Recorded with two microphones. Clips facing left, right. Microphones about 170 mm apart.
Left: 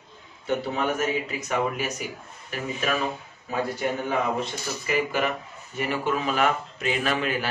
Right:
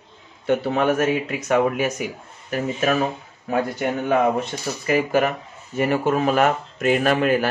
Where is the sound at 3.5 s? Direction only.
60° right (ahead or behind).